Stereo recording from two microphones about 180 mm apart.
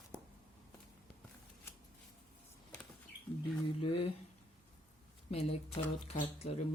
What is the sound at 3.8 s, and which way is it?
Speech, 35° left (ahead or behind).